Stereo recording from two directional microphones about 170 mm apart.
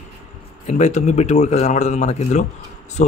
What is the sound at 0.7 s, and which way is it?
Speech, 45° left (ahead or behind).